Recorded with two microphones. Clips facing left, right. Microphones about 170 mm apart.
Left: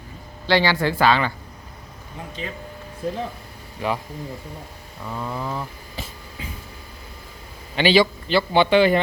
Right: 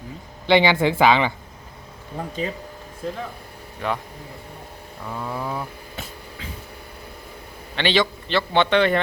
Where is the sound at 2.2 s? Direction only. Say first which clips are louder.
Right 6 dB; 55° right (ahead or behind).